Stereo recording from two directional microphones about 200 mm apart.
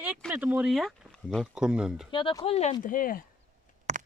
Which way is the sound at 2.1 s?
25° left (ahead or behind).